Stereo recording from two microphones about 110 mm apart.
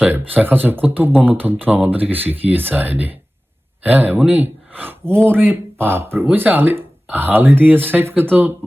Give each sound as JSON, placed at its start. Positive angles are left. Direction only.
{"t": 0.0, "sound": "speech", "side_deg": -15}